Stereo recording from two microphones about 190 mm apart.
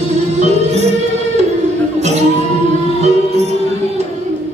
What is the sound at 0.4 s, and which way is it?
Music, 35° right (ahead or behind).